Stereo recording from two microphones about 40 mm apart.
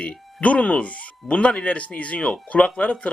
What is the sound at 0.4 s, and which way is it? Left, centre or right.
Speech, left.